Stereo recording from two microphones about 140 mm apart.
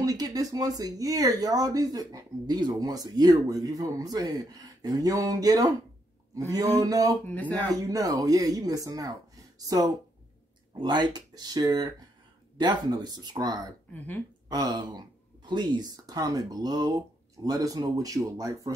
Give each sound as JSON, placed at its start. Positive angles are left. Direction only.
{"t": 0.0, "sound": "speech", "side_deg": -25}
{"t": 7.2, "sound": "speech", "side_deg": 10}
{"t": 7.5, "sound": "speech", "side_deg": -25}
{"t": 13.9, "sound": "speech", "side_deg": 10}
{"t": 14.5, "sound": "speech", "side_deg": -30}